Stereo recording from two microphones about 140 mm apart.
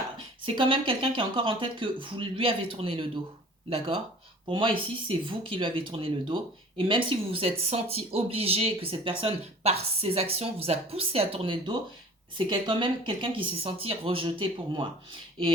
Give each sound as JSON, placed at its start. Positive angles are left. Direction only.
{"t": 0.4, "sound": "speech", "side_deg": -40}